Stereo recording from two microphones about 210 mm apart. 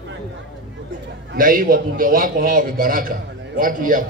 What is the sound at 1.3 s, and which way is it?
A man's voice, 40° right (ahead or behind).